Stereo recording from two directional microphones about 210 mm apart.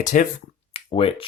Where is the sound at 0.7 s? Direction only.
25° left (ahead or behind).